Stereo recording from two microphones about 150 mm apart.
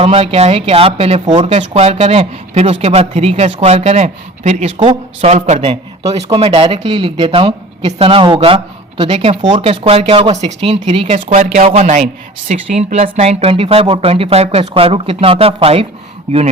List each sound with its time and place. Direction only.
0.0 s speech: 40° right (ahead or behind)